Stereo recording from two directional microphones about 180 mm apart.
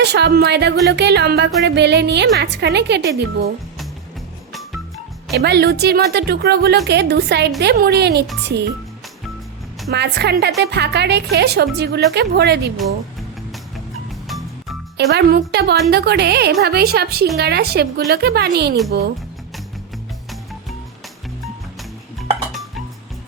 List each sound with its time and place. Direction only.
0.0 s a woman's voice: 70° right (ahead or behind)
5.3 s a woman's voice: 65° right (ahead or behind)
9.9 s a woman's voice: 70° right (ahead or behind)
14.3 s music: centre (ahead or behind)
14.9 s a woman's voice: 65° right (ahead or behind)